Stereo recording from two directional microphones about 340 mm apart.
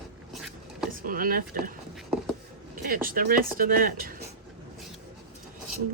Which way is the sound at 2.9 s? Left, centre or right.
Right.